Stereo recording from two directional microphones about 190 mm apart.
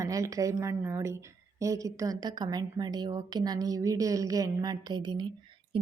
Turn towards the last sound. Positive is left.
turn(degrees=-25)  # may be behind; listen again after turning